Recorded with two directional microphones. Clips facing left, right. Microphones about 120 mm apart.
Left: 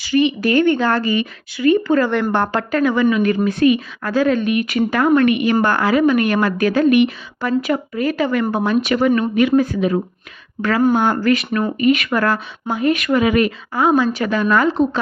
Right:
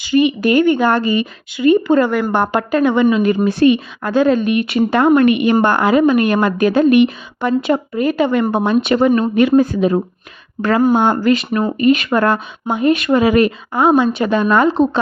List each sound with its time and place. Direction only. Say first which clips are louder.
0.0 s speech: right 3 dB; 20° right (ahead or behind)
2.0 s speech: right 2 dB; 5° right (ahead or behind); by 14.8 s 25° right (ahead or behind)